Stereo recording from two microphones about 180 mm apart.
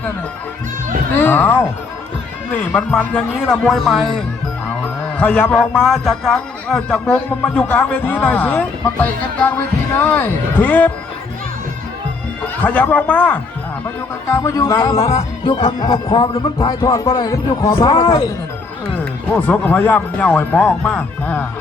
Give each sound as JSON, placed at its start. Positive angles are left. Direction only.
{"t": 1.2, "sound": "speech", "side_deg": 10}
{"t": 2.7, "sound": "speech", "side_deg": 5}
{"t": 12.6, "sound": "speech", "side_deg": 10}
{"t": 19.3, "sound": "speech", "side_deg": 10}